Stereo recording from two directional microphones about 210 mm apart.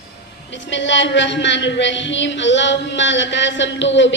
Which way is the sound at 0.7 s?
60° left (ahead or behind).